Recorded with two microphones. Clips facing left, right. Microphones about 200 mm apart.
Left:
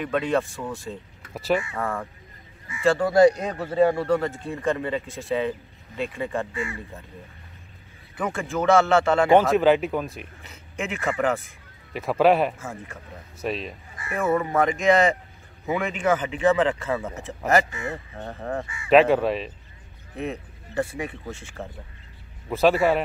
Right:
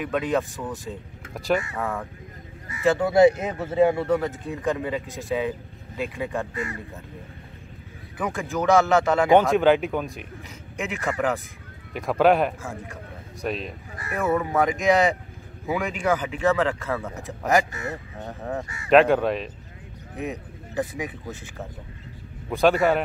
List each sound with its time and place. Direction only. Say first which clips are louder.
0.0 s speech: left 1 dB; 5° right (ahead or behind)
1.3 s speech: even; centre (ahead or behind)
2.8 s speech: even; 20° right (ahead or behind)
4.0 s speech: even; 5° right (ahead or behind)
5.0 s speech: right 1 dB; 15° right (ahead or behind)
5.9 s speech: left 1 dB; 5° right (ahead or behind)
6.5 s speech: even; 40° right (ahead or behind)
8.2 s speech: even; centre (ahead or behind)
17.6 s speech: left 1 dB; 40° right (ahead or behind)
18.2 s speech: left 1 dB; 5° right (ahead or behind)
20.2 s vehicle: left 1 dB; centre (ahead or behind)
22.5 s speech: even; centre (ahead or behind)